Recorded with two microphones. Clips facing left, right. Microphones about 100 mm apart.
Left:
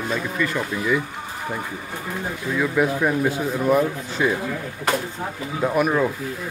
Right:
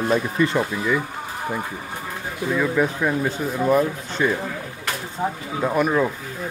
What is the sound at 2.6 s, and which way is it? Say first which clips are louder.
Speech: left 2 dB; 5° left (ahead or behind).